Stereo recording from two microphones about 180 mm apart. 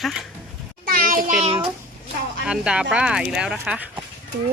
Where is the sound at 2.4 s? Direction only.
5° right (ahead or behind).